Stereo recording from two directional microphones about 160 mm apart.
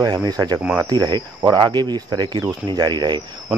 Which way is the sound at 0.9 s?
25° right (ahead or behind).